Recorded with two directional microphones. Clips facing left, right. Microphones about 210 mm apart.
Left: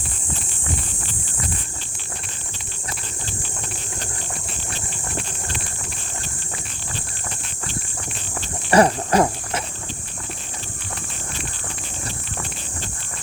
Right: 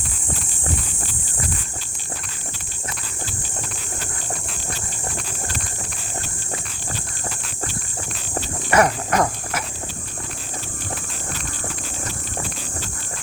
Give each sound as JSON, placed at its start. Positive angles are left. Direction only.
{"t": 8.7, "sound": "cricket", "side_deg": 30}